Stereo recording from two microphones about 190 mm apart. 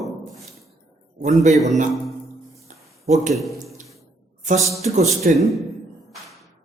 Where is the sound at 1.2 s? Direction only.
35° right (ahead or behind).